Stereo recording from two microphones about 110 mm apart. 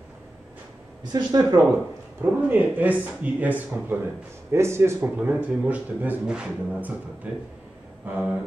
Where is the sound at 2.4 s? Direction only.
15° right (ahead or behind).